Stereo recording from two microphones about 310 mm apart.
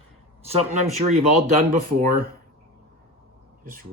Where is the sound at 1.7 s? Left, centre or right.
Right.